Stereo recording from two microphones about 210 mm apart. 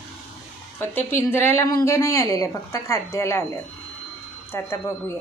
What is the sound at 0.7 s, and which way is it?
A woman's voice, 10° left (ahead or behind).